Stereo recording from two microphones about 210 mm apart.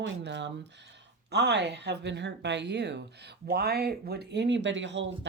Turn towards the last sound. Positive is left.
turn(degrees=-60)  # may be behind; listen again after turning